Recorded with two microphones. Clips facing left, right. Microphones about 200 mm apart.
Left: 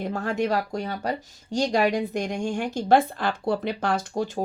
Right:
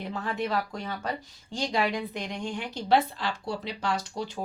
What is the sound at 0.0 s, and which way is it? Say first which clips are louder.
Speech: left 6 dB; 45° left (ahead or behind).